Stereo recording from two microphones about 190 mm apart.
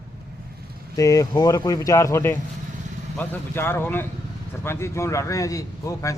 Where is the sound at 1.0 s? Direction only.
20° left (ahead or behind).